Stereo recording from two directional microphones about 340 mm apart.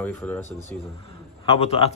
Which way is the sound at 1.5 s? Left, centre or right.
Centre.